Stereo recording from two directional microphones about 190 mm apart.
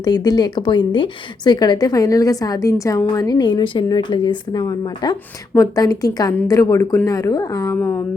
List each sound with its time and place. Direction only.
0.0 s a woman's voice: 20° left (ahead or behind)